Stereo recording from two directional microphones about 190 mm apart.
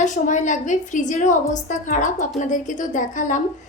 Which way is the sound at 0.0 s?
40° left (ahead or behind).